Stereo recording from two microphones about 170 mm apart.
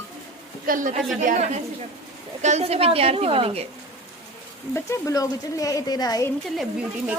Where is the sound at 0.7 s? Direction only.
50° right (ahead or behind); by 3.6 s 35° right (ahead or behind).